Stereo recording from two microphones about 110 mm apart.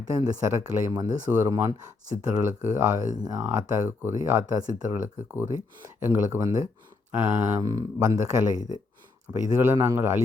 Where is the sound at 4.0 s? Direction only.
20° right (ahead or behind).